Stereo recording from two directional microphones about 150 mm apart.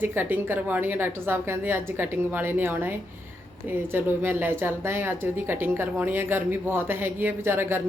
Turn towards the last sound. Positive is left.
turn(degrees=-15)  # may be behind; listen again after turning